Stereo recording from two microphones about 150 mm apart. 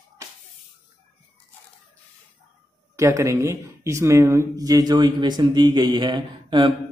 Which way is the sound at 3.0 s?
20° right (ahead or behind).